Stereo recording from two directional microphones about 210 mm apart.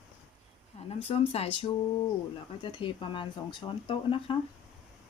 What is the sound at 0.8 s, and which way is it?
Speech, 30° left (ahead or behind).